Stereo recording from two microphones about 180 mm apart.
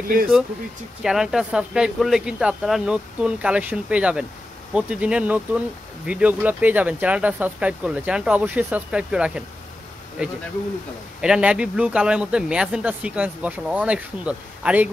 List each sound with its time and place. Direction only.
0.1 s speech: 50° right (ahead or behind)
1.0 s a man's voice: 5° right (ahead or behind)